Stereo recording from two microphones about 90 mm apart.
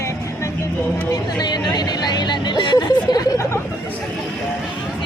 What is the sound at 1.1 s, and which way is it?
Music, 50° left (ahead or behind).